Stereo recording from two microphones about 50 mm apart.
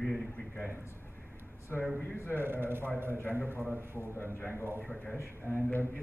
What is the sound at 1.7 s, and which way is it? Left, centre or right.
Speech, centre.